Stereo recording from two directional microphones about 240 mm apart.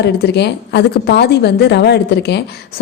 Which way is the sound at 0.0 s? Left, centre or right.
Left.